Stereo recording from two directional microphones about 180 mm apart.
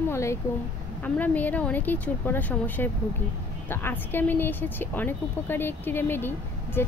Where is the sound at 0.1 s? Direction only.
15° left (ahead or behind).